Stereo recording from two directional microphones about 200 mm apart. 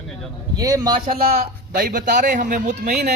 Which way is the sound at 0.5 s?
20° right (ahead or behind).